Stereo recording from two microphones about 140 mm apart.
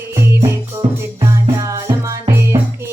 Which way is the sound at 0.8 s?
55° right (ahead or behind).